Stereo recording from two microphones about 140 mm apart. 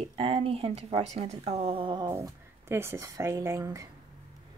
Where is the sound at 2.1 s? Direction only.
20° right (ahead or behind).